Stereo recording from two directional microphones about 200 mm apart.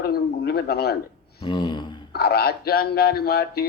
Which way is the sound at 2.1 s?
50° left (ahead or behind).